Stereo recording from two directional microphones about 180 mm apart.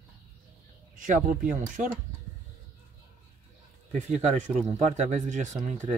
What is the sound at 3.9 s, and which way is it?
Speech, 40° right (ahead or behind).